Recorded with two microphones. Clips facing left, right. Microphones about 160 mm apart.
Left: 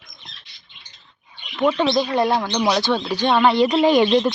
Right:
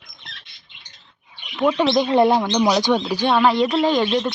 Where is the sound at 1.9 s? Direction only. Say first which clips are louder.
Right 3 dB; 20° right (ahead or behind).